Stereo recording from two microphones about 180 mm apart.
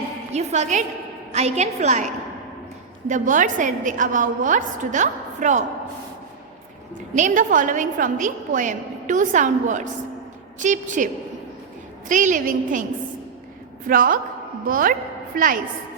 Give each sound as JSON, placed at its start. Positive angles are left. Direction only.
{"t": 0.3, "sound": "a woman's voice", "side_deg": -40}
{"t": 7.2, "sound": "a woman's voice", "side_deg": -45}
{"t": 13.8, "sound": "a woman's voice", "side_deg": -50}